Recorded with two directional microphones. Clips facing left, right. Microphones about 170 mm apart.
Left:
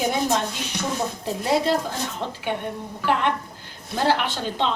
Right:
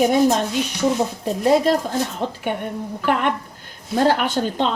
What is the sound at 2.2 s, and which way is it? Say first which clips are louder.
Speech: right 3 dB; 50° right (ahead or behind).